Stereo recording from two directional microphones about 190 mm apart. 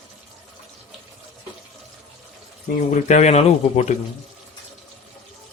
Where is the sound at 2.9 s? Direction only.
40° left (ahead or behind).